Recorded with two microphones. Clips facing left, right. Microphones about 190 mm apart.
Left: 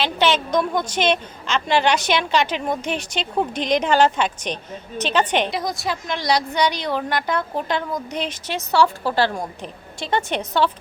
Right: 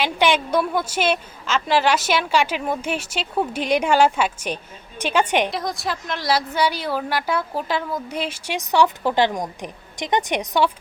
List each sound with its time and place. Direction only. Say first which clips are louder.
0.0 s a woman's voice: even; 10° right (ahead or behind)
5.5 s a woman's voice: left 1 dB; centre (ahead or behind)